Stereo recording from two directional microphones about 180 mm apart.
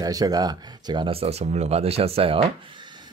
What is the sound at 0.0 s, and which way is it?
Speech, 20° right (ahead or behind).